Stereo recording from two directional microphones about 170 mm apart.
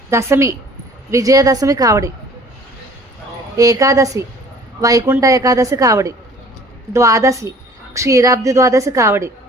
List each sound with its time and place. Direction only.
0.1 s a woman's voice: 15° right (ahead or behind)
3.6 s a woman's voice: 20° right (ahead or behind)